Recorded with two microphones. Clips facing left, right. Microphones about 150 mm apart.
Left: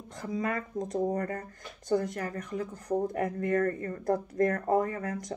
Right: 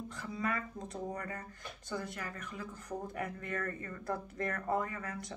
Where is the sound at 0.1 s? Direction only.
40° left (ahead or behind).